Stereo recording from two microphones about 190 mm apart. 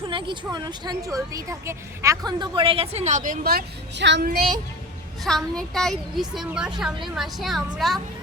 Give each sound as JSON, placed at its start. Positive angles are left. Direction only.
{"t": 0.1, "sound": "a sound", "side_deg": -25}
{"t": 0.5, "sound": "a woman's voice", "side_deg": -20}
{"t": 5.2, "sound": "a woman's voice", "side_deg": 0}